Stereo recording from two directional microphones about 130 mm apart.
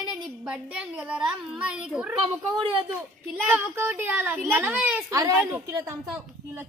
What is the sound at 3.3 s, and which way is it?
A child's voice, 15° right (ahead or behind).